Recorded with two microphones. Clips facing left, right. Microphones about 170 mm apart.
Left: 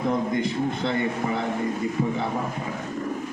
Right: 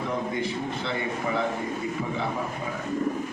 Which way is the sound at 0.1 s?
40° left (ahead or behind).